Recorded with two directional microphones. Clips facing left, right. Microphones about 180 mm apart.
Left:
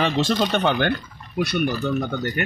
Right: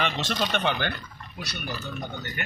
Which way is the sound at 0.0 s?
35° left (ahead or behind).